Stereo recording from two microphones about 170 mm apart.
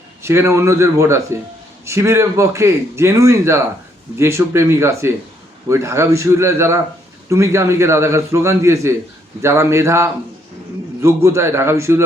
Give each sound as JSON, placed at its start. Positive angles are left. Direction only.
{"t": 0.2, "sound": "a man's voice", "side_deg": -15}